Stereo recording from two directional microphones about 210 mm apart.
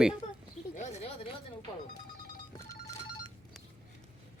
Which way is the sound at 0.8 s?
35° left (ahead or behind).